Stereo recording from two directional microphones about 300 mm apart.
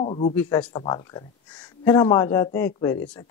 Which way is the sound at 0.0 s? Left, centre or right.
Centre.